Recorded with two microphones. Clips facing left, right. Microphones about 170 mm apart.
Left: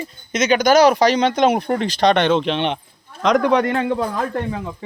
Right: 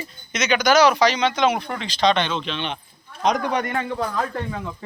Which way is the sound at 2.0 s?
65° left (ahead or behind).